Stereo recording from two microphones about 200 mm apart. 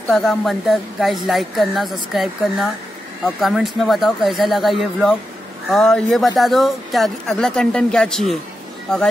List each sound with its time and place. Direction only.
0.1 s speech: centre (ahead or behind)